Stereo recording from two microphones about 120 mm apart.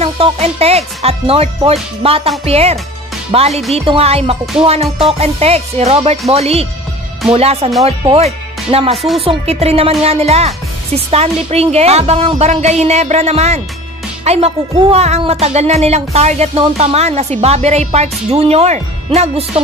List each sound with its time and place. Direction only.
0.0 s speech: 55° right (ahead or behind)
8.9 s speech: centre (ahead or behind)
9.2 s speech: 55° right (ahead or behind)
14.2 s music: 60° right (ahead or behind)
14.9 s speech: 60° right (ahead or behind)